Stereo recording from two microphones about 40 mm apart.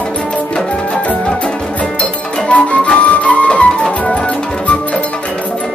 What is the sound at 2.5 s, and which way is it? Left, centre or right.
Music, left.